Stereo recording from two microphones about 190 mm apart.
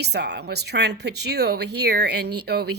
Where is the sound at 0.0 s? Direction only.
60° right (ahead or behind).